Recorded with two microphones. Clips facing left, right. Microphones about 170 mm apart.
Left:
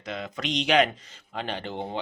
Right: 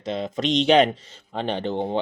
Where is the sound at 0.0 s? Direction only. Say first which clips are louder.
Right 7 dB; 25° right (ahead or behind).